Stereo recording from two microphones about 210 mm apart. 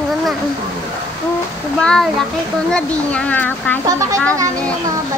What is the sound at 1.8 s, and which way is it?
A child's voice, centre (ahead or behind).